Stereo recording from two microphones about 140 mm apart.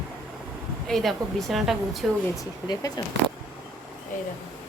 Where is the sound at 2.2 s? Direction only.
25° left (ahead or behind).